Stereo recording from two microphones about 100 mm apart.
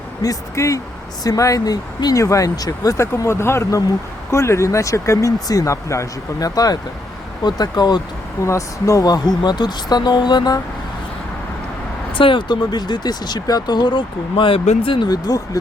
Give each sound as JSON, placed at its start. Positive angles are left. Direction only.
{"t": 0.2, "sound": "speech", "side_deg": 35}
{"t": 8.4, "sound": "speech", "side_deg": 30}
{"t": 12.1, "sound": "speech", "side_deg": 55}
{"t": 15.0, "sound": "speech", "side_deg": 40}